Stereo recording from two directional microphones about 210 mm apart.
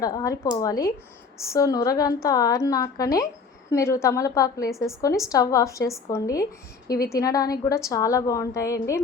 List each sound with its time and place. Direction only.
0.0 s a woman's voice: 15° left (ahead or behind)